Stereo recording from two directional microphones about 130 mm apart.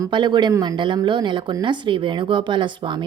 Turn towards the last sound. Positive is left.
turn(degrees=-35)  # may be behind; listen again after turning